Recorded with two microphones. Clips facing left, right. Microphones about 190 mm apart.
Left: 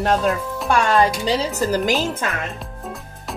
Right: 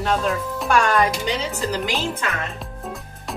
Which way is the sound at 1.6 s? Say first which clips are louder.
Left 5 dB; 45° left (ahead or behind).